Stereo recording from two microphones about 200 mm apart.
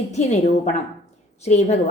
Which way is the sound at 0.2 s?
35° left (ahead or behind).